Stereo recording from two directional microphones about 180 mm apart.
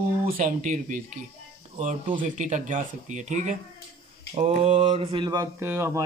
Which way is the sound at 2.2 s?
45° right (ahead or behind).